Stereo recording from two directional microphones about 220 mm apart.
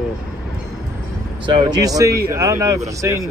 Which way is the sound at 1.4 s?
20° right (ahead or behind).